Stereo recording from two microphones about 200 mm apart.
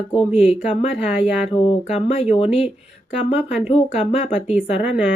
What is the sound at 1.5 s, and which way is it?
Speech, 30° left (ahead or behind).